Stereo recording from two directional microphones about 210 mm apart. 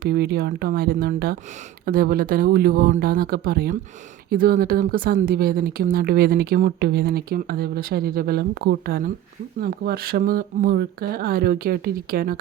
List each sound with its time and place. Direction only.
0.0 s speech: 50° right (ahead or behind)